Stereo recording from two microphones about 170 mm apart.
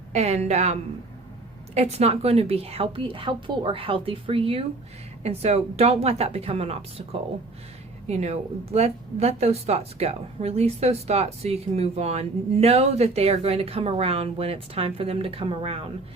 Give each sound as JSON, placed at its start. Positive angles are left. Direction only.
{"t": 0.1, "sound": "speech", "side_deg": -40}